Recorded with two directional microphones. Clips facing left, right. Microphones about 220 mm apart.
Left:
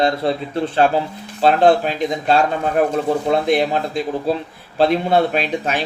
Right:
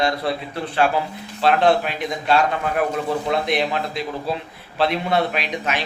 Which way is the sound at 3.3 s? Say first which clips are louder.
Left 5 dB; 35° left (ahead or behind).